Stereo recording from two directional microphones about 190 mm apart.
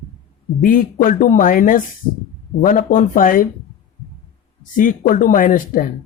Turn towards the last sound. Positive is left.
turn(degrees=45)  # may be behind; listen again after turning